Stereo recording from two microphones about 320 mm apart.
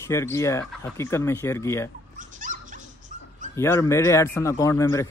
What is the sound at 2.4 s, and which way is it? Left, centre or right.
Dog, right.